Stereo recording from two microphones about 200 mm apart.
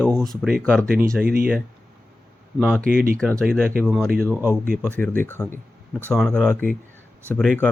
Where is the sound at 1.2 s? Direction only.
50° right (ahead or behind).